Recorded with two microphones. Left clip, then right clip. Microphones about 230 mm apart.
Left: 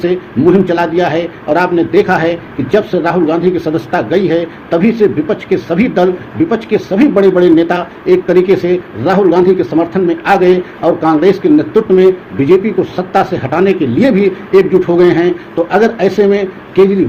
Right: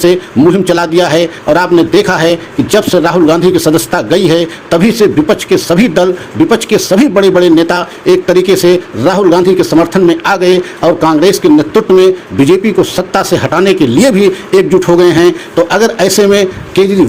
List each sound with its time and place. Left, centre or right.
0.0 s speech: right